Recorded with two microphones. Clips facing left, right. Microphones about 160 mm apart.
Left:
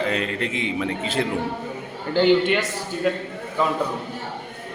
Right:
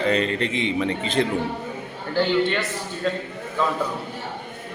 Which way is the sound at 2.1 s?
20° left (ahead or behind).